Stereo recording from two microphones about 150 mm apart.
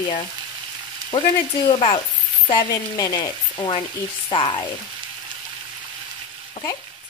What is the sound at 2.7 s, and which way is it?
Frying, 25° left (ahead or behind).